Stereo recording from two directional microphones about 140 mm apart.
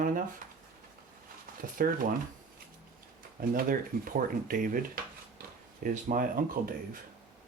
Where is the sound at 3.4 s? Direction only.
75° right (ahead or behind).